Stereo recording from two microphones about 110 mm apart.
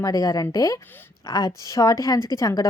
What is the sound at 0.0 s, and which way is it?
A woman's voice, 35° left (ahead or behind).